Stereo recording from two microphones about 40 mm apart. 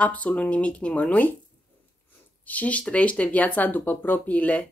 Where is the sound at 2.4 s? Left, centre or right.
Left.